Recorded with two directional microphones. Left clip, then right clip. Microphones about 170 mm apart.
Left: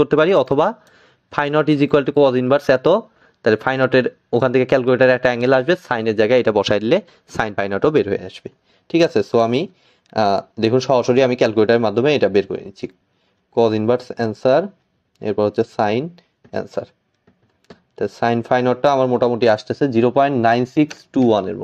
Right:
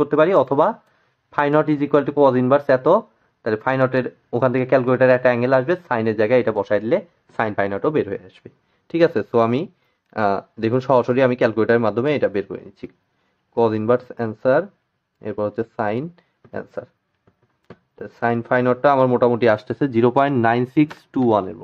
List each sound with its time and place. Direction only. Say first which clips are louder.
0.0 s speech: left 1 dB; 40° left (ahead or behind); by 16.9 s 25° left (ahead or behind)
17.9 s speech: left 3 dB; 20° left (ahead or behind); by 21.3 s centre (ahead or behind)
21.3 s speech: even; 15° left (ahead or behind)